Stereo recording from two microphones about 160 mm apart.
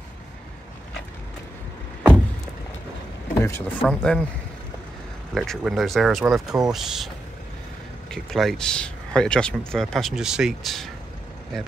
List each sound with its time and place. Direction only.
3.3 s speech: 15° left (ahead or behind)
3.8 s speech: 5° left (ahead or behind)
5.3 s speech: centre (ahead or behind)
8.1 s speech: centre (ahead or behind)